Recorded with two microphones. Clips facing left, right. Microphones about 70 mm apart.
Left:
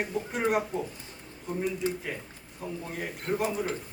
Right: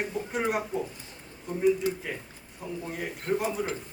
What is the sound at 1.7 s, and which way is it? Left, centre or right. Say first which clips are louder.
Speech: right 8 dB; centre.